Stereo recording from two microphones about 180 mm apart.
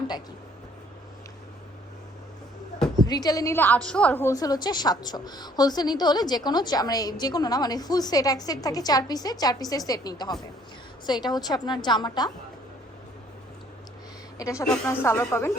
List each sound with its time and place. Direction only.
3.1 s a woman's voice: 20° left (ahead or behind)
14.3 s a woman's voice: 15° left (ahead or behind)